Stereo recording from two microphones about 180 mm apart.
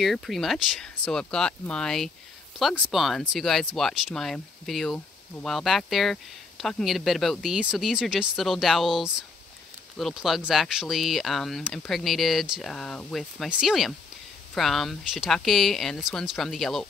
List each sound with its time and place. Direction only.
0.0 s speech: centre (ahead or behind)